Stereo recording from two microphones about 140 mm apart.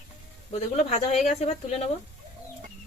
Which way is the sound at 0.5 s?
50° left (ahead or behind).